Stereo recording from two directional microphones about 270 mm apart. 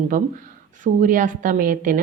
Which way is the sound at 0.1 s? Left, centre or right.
Right.